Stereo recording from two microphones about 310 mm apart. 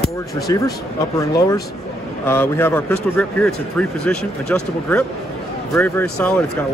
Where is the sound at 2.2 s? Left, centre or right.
Centre.